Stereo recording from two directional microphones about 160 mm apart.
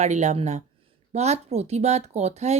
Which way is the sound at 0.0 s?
45° right (ahead or behind).